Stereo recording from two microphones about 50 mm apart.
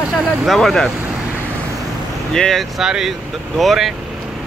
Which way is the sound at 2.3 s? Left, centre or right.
Centre.